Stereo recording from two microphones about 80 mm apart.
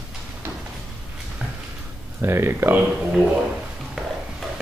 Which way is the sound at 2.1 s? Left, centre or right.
Right.